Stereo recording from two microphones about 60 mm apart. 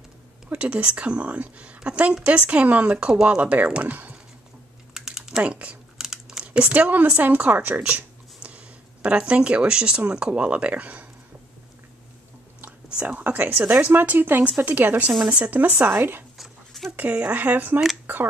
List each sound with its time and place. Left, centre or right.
0.5 s a woman's voice: right
4.9 s typing: centre
5.4 s speech: right
5.9 s crumpling: centre
6.4 s speech: right
13.0 s speech: right
16.3 s dog: centre
16.9 s speech: right
18.0 s a sound: right